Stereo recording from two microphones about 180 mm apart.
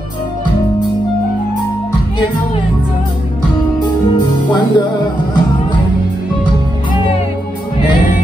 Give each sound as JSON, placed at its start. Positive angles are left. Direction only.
{"t": 4.1, "sound": "music", "side_deg": 25}